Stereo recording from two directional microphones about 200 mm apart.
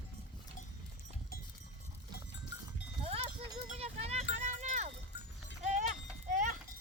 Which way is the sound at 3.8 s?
30° right (ahead or behind).